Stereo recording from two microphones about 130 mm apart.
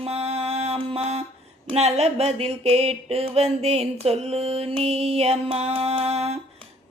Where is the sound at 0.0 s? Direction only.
50° right (ahead or behind).